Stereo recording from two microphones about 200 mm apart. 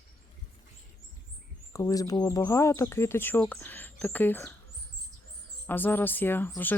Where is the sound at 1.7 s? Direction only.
15° left (ahead or behind).